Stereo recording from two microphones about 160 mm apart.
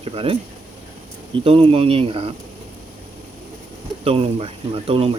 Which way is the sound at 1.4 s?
35° right (ahead or behind).